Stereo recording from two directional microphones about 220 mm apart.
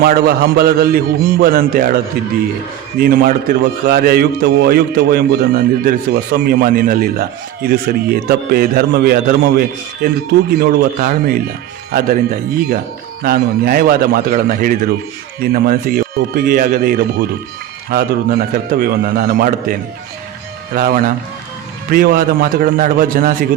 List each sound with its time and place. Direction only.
0.0 s a man's voice: 45° right (ahead or behind)
3.0 s a man's voice: 40° right (ahead or behind)
20.7 s a man's voice: 40° right (ahead or behind)